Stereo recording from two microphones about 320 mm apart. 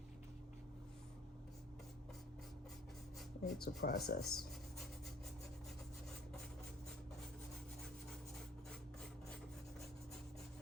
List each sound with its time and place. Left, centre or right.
3.4 s speech: left
4.2 s speech: centre